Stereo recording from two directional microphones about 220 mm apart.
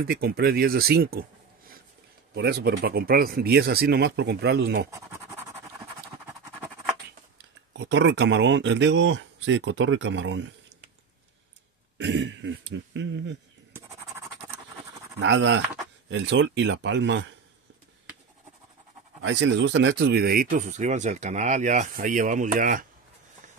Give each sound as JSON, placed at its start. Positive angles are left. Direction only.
{"t": 0.0, "sound": "speech", "side_deg": -45}
{"t": 2.3, "sound": "speech", "side_deg": -50}
{"t": 4.9, "sound": "scratch", "side_deg": -15}
{"t": 7.7, "sound": "speech", "side_deg": -55}
{"t": 12.0, "sound": "speech", "side_deg": -55}
{"t": 13.7, "sound": "scratch", "side_deg": -15}
{"t": 15.1, "sound": "speech", "side_deg": -55}
{"t": 19.2, "sound": "speech", "side_deg": -55}